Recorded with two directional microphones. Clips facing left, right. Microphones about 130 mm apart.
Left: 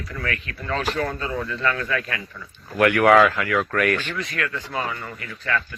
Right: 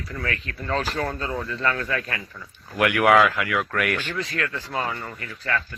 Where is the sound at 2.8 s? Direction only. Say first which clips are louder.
Left 2 dB; 10° right (ahead or behind).